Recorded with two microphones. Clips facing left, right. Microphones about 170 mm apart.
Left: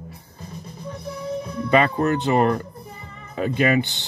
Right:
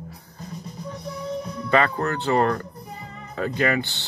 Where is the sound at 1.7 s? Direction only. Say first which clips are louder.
Left 3 dB; 20° left (ahead or behind).